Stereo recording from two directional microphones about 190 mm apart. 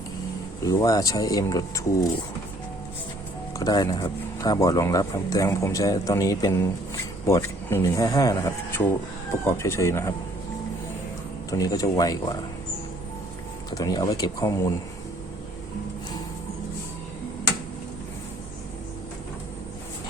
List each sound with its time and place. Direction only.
0.6 s speech: 15° left (ahead or behind)
3.6 s speech: 20° left (ahead or behind)
11.5 s speech: 20° left (ahead or behind)
13.7 s speech: 20° left (ahead or behind)